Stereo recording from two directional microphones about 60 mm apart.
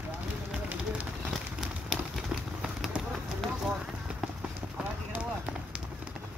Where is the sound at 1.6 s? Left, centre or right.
Centre.